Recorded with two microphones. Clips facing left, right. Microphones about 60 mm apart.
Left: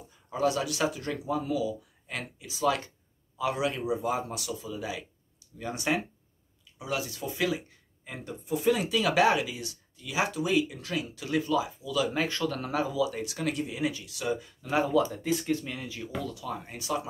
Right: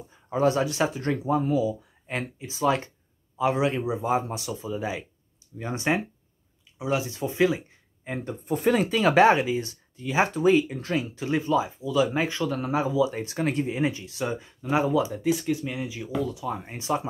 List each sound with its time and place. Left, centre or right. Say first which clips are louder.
0.1 s speech: right 5 dB; right